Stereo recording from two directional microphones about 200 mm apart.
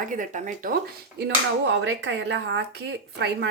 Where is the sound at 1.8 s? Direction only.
65° right (ahead or behind).